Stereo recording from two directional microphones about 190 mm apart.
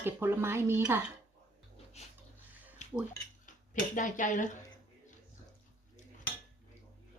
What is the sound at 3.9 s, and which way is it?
Speech, 45° left (ahead or behind).